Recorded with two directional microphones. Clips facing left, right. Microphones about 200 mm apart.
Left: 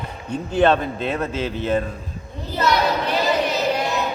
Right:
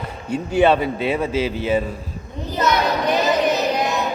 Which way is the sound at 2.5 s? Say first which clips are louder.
Even; 15° right (ahead or behind).